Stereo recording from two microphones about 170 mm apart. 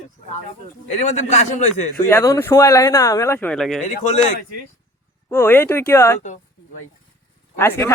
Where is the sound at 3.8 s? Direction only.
45° left (ahead or behind).